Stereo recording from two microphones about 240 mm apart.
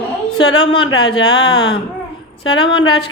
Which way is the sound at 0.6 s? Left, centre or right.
Left.